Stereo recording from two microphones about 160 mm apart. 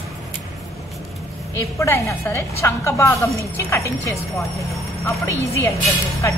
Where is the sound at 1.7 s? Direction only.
15° left (ahead or behind).